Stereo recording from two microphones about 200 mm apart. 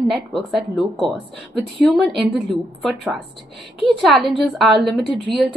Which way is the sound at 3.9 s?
Centre (ahead or behind).